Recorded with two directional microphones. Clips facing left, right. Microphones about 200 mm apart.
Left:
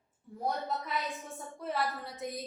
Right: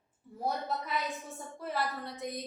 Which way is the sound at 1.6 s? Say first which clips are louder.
Left 1 dB; centre (ahead or behind).